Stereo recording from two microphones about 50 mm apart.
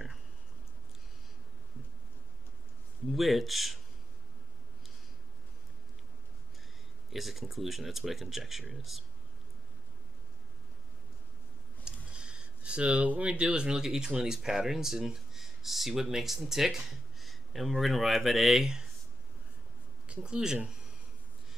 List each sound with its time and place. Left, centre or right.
3.1 s speech: centre
7.1 s speech: centre
11.8 s speech: centre
20.1 s speech: right